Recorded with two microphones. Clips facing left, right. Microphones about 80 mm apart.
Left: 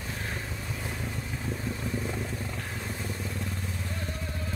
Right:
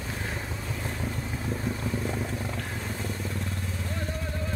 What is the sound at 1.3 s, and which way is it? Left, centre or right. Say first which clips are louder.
Boat: right 2 dB; centre.